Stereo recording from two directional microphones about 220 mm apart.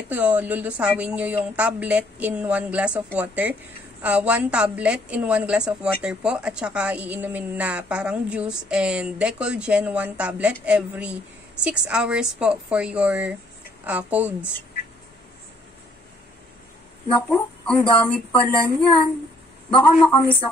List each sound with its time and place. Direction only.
0.1 s a woman's voice: 5° right (ahead or behind)
17.3 s speech: 10° left (ahead or behind)